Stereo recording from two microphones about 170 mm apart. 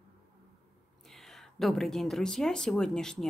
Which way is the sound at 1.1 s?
Centre (ahead or behind).